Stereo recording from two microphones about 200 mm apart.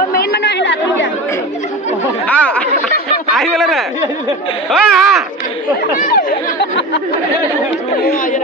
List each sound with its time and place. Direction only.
0.1 s chatter: 50° left (ahead or behind)
2.2 s chatter: 5° left (ahead or behind)
3.3 s a sound: centre (ahead or behind)
5.9 s chatter: 40° left (ahead or behind)
8.0 s chatter: 45° left (ahead or behind)